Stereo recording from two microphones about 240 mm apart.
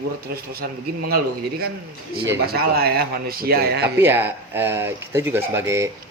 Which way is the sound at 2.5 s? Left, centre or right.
Right.